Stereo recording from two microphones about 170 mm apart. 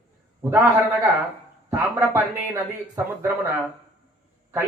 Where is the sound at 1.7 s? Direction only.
15° right (ahead or behind).